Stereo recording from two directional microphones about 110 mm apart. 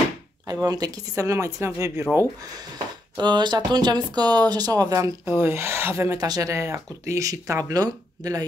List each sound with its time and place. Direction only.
0.5 s speech: 35° right (ahead or behind)
3.2 s speech: 40° right (ahead or behind); by 6.1 s 25° right (ahead or behind)
6.1 s speech: 35° right (ahead or behind)